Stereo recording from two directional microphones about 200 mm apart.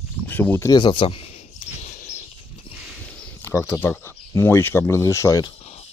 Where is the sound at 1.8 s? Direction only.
35° left (ahead or behind).